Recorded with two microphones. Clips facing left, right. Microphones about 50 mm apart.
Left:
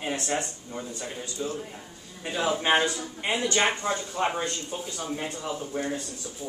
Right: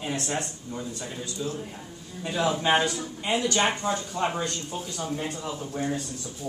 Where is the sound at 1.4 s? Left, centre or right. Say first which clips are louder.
Left 1 dB; left.